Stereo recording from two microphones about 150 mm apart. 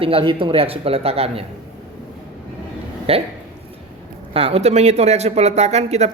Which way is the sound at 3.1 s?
45° right (ahead or behind).